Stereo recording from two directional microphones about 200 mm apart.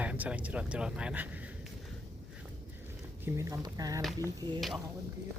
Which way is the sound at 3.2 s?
15° right (ahead or behind).